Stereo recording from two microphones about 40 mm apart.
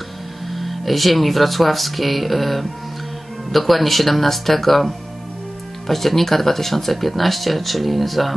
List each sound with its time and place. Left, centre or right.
0.5 s speech: centre